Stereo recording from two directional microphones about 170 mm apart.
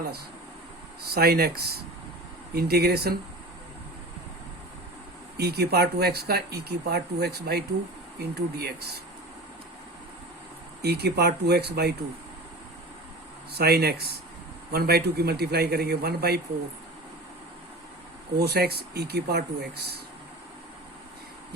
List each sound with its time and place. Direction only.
1.0 s speech: 65° right (ahead or behind)
5.4 s speech: 70° right (ahead or behind)
10.8 s speech: 70° right (ahead or behind)
13.5 s speech: 70° right (ahead or behind)
18.3 s speech: 70° right (ahead or behind)